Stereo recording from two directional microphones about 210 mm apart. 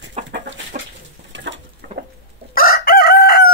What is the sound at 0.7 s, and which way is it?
Chicken, 40° right (ahead or behind).